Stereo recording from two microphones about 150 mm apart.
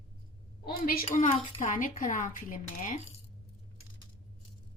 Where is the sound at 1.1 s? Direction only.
50° left (ahead or behind).